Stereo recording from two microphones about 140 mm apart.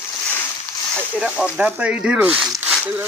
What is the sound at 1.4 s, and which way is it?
Speech, 10° right (ahead or behind).